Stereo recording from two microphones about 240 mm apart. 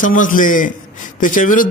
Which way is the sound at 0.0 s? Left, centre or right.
Left.